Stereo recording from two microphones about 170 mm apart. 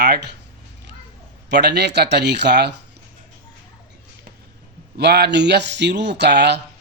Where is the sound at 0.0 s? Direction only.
75° right (ahead or behind).